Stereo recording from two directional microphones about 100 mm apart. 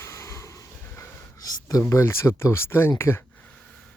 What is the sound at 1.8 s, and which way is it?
Speech, 25° left (ahead or behind).